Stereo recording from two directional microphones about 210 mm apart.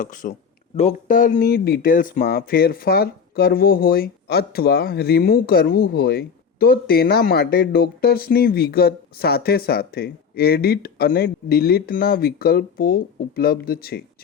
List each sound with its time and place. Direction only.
0.0 s speech: 40° left (ahead or behind)